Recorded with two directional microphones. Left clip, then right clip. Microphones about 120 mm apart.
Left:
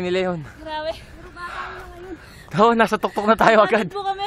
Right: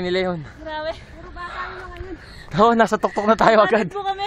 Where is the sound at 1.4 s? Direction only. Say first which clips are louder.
Even; 20° left (ahead or behind).